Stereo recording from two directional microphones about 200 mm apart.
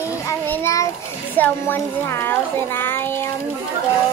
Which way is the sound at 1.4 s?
10° left (ahead or behind).